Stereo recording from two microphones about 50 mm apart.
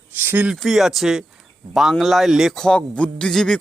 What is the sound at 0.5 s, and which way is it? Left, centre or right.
Speech, centre.